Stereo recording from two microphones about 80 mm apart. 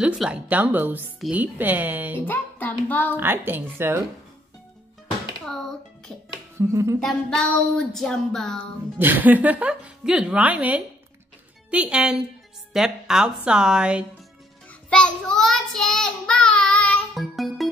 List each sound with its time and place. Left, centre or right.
0.0 s a woman's voice: centre
0.5 s a woman's voice: right
2.1 s speech: left
3.2 s a woman's voice: right
5.4 s a sound: centre
6.7 s music: right
7.0 s a sound: centre
7.8 s speech: centre
8.9 s a woman's voice: right
14.7 s child singing: centre
17.1 s music: centre